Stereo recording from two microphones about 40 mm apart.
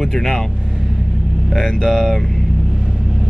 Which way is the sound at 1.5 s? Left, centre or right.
Centre.